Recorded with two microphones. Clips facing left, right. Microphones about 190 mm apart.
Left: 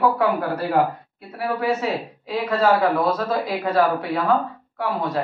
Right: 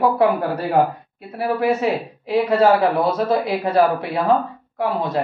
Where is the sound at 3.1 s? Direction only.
25° right (ahead or behind).